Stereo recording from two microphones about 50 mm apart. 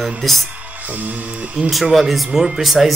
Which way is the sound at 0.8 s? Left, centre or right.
Right.